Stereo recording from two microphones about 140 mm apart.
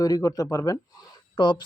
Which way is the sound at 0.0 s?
25° left (ahead or behind).